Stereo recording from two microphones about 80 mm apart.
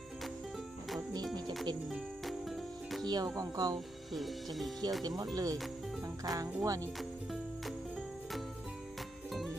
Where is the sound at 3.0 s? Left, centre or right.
Right.